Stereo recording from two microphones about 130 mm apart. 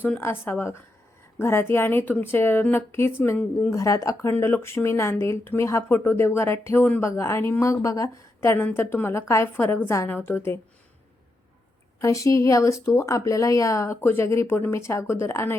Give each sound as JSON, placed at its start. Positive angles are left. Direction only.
{"t": 0.0, "sound": "a woman's voice", "side_deg": 15}
{"t": 11.9, "sound": "speech", "side_deg": 25}